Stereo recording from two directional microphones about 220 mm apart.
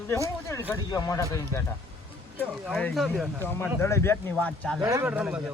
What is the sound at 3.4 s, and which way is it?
Speech, 10° left (ahead or behind).